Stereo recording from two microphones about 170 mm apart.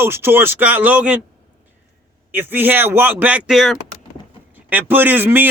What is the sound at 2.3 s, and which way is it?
A man's voice, 10° right (ahead or behind).